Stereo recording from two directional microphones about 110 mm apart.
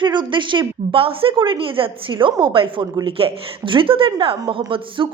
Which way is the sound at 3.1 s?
55° right (ahead or behind).